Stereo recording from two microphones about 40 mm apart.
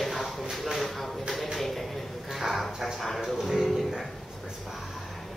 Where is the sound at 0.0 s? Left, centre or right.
Centre.